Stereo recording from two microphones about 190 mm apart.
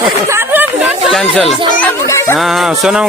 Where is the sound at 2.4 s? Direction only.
Centre (ahead or behind).